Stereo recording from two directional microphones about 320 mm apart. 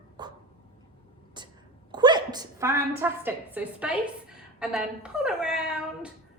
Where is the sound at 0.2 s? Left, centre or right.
Centre.